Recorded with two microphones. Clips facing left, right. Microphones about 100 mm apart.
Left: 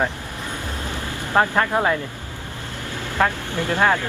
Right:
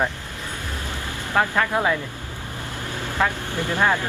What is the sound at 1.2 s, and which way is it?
Speech, 20° left (ahead or behind).